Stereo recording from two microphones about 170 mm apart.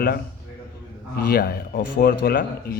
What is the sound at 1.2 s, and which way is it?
A man's voice, 60° left (ahead or behind).